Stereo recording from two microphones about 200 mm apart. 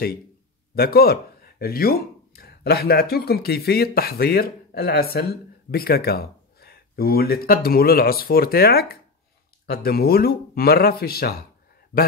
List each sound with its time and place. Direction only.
0.7 s speech: 50° left (ahead or behind)